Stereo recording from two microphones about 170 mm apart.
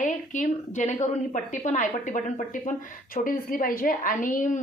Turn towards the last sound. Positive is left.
turn(degrees=50)  # may be behind; listen again after turning